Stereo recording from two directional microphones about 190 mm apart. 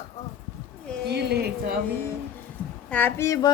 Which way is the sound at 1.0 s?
60° right (ahead or behind).